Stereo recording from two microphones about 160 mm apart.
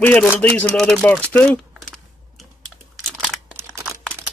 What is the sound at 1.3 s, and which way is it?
Typing, 5° left (ahead or behind).